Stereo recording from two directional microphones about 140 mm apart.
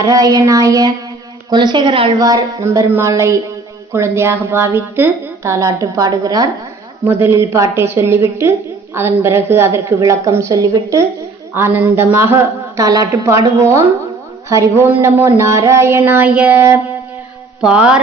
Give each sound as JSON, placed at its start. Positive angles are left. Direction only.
{"t": 0.0, "sound": "a woman's voice", "side_deg": -25}
{"t": 2.1, "sound": "a woman's voice", "side_deg": -25}
{"t": 7.0, "sound": "a woman's voice", "side_deg": -15}
{"t": 17.6, "sound": "mantra", "side_deg": -5}